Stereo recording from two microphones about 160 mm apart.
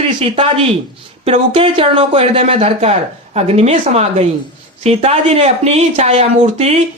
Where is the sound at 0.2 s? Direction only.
35° right (ahead or behind).